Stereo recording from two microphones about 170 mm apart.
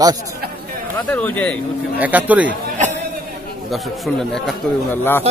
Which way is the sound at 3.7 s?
Centre (ahead or behind).